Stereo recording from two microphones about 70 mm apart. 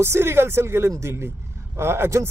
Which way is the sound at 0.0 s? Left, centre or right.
Right.